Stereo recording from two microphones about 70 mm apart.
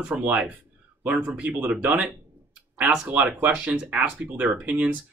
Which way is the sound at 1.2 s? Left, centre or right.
Centre.